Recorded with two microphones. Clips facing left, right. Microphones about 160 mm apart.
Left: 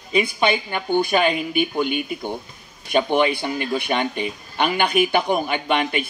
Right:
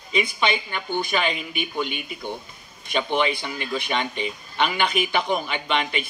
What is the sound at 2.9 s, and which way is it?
Speech, 50° left (ahead or behind).